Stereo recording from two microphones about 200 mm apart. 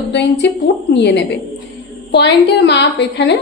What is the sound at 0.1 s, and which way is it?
A woman's voice, 60° left (ahead or behind).